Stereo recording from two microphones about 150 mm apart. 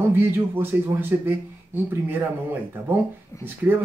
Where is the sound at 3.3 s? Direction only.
15° left (ahead or behind).